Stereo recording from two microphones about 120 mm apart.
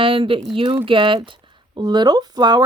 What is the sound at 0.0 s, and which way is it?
Speech, 45° right (ahead or behind).